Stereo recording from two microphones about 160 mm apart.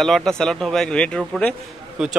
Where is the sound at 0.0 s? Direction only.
5° left (ahead or behind).